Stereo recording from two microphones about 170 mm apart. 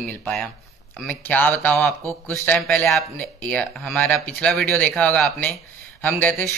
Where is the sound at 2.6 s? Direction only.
5° left (ahead or behind).